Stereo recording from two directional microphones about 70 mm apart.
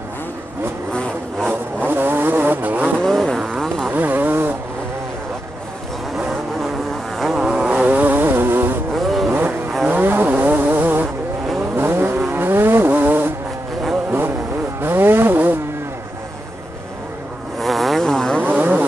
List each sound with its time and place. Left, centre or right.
1.9 s vehicle: right
3.0 s vehicle: centre
3.9 s vehicle: right
7.3 s vehicle: centre; by 8.7 s right
8.9 s vehicle: centre
9.8 s vehicle: right
14.8 s vehicle: right
17.6 s vehicle: centre
18.4 s a sound: right